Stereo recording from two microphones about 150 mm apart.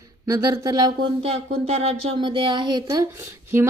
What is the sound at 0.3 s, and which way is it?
Speech, 25° right (ahead or behind).